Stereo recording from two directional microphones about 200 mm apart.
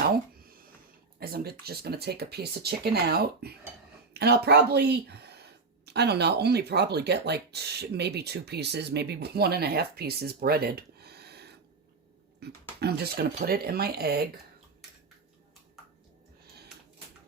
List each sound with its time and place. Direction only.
1.2 s speech: 50° right (ahead or behind)